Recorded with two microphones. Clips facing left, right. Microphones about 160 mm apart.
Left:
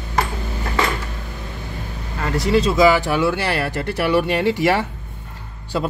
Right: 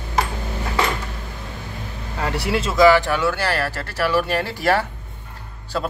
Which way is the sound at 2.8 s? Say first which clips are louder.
Right 5 dB; 10° left (ahead or behind).